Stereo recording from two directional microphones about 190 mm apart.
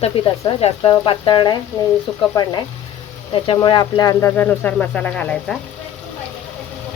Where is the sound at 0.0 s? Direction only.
30° left (ahead or behind); by 5.5 s 5° left (ahead or behind).